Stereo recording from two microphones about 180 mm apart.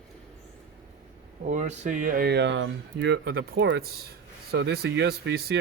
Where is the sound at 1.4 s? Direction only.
40° right (ahead or behind).